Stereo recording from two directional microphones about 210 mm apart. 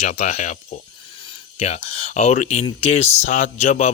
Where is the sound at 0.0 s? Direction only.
30° left (ahead or behind).